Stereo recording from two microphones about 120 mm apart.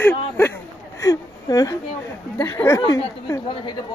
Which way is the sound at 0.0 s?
20° left (ahead or behind).